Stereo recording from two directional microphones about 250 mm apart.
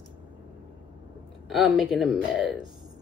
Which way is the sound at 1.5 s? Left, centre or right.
Centre.